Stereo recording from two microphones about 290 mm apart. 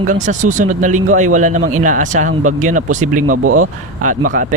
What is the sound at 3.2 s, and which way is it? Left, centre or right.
Speech, right.